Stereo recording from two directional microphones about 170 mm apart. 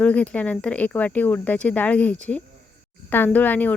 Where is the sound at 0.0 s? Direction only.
5° left (ahead or behind).